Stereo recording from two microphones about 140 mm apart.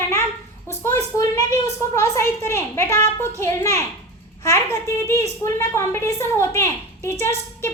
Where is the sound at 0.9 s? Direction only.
20° left (ahead or behind).